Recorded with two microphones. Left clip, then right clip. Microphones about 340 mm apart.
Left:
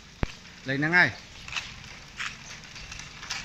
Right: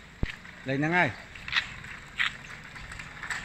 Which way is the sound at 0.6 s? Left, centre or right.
Centre.